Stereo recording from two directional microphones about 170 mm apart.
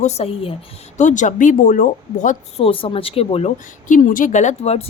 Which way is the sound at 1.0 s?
45° left (ahead or behind).